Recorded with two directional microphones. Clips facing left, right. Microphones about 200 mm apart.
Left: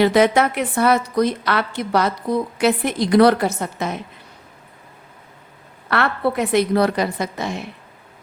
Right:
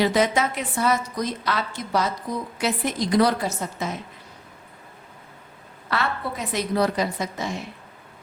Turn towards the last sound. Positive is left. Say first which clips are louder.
# left 4 dB
turn(degrees=65)  # may be behind; listen again after turning